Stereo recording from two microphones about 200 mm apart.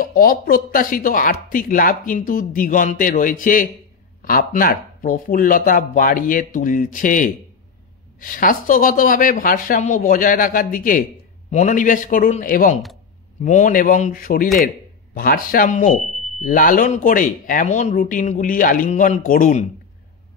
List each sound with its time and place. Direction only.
0.0 s speech: 45° left (ahead or behind)